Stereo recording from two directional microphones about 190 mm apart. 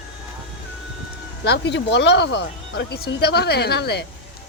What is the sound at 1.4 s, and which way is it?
Speech, 65° left (ahead or behind).